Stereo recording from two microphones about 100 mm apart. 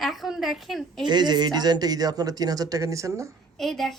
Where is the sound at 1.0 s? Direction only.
45° right (ahead or behind); by 3.3 s 30° right (ahead or behind).